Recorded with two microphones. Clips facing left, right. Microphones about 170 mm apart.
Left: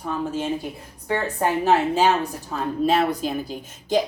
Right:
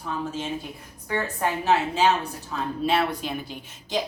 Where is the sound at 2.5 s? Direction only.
40° left (ahead or behind).